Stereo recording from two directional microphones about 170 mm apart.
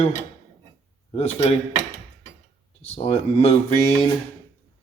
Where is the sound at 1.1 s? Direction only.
35° left (ahead or behind).